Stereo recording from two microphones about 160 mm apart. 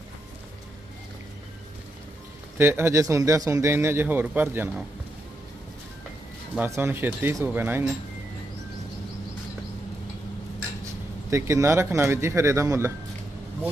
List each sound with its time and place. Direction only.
2.6 s a man's voice: 15° right (ahead or behind)
6.6 s a man's voice: 15° right (ahead or behind)
11.3 s a man's voice: 20° right (ahead or behind)